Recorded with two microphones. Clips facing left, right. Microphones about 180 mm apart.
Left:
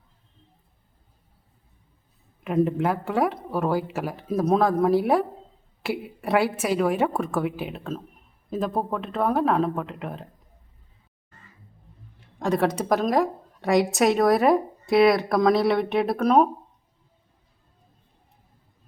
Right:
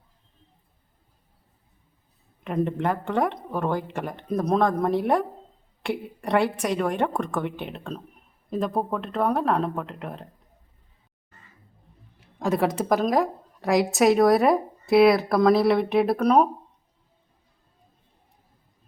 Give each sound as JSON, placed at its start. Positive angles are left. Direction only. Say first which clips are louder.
{"t": 2.4, "sound": "a woman's voice", "louder": "left 3 dB", "side_deg": 5}
{"t": 12.2, "sound": "a woman's voice", "louder": "left 1 dB", "side_deg": 0}